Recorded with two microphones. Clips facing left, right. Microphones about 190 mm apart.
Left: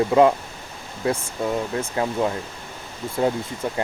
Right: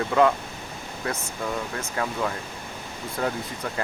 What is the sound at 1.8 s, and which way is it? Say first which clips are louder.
Speech: left 5 dB; 25° left (ahead or behind).